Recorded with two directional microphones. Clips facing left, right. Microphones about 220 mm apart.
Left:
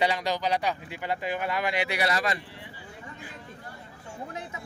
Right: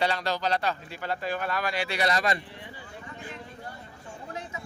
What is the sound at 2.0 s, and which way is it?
Speech, 5° left (ahead or behind).